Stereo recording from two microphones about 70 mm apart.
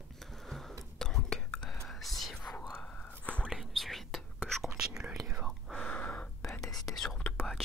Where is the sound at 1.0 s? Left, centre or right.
Centre.